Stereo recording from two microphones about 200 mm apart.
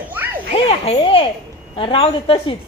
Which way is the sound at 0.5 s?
30° left (ahead or behind).